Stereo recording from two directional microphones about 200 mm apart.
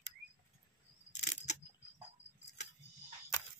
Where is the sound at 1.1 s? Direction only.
35° left (ahead or behind).